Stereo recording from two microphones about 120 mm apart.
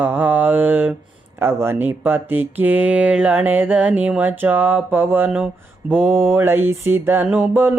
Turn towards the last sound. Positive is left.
turn(degrees=-15)  # may be behind; listen again after turning